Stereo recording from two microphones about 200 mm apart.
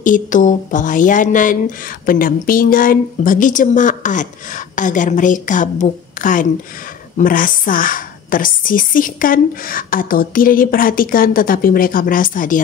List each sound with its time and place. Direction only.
0.0 s a woman's voice: 40° left (ahead or behind)